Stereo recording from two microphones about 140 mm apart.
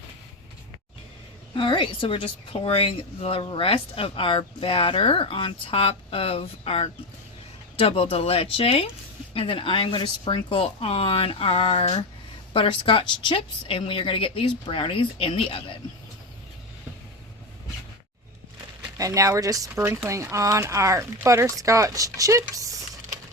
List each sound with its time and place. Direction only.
1.5 s a woman's voice: 35° left (ahead or behind)
18.9 s speech: 25° right (ahead or behind)